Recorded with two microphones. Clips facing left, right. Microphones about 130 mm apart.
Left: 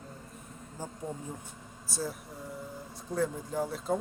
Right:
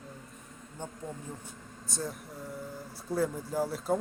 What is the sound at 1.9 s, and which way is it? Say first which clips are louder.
Speech: left 1 dB; 5° left (ahead or behind).